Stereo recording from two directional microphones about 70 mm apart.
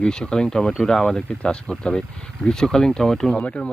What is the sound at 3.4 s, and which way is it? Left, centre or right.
Speech, centre.